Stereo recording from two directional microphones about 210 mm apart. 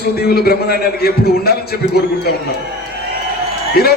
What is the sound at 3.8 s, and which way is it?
Speech, 50° left (ahead or behind).